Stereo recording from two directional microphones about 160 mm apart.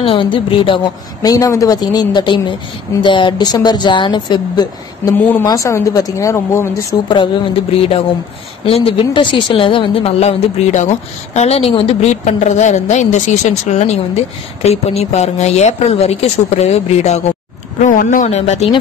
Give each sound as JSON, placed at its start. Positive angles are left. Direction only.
{"t": 0.0, "sound": "a woman's voice", "side_deg": 30}
{"t": 1.2, "sound": "speech", "side_deg": 20}
{"t": 8.6, "sound": "a woman's voice", "side_deg": 35}
{"t": 17.8, "sound": "speech", "side_deg": 55}